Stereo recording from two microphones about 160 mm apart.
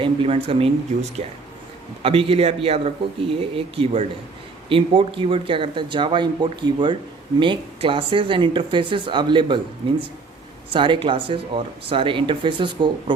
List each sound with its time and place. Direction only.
0.0 s speech: 35° right (ahead or behind)
10.7 s speech: 30° right (ahead or behind)